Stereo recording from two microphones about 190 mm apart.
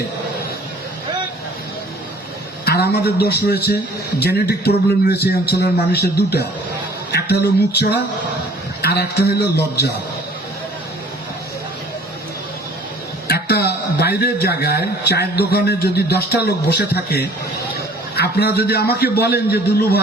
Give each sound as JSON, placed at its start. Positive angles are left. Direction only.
{"t": 2.6, "sound": "a man's voice", "side_deg": 60}
{"t": 7.1, "sound": "music", "side_deg": 60}
{"t": 8.8, "sound": "a man's voice", "side_deg": 60}
{"t": 13.2, "sound": "a man's voice", "side_deg": 55}